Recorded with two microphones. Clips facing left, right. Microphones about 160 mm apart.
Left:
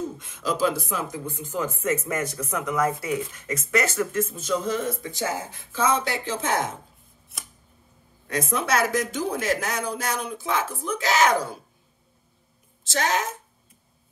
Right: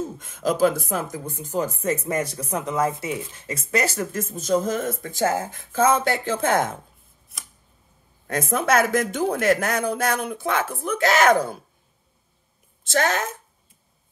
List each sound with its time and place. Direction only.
0.2 s speech: 50° right (ahead or behind)
8.3 s speech: 50° right (ahead or behind)
12.8 s speech: 55° right (ahead or behind)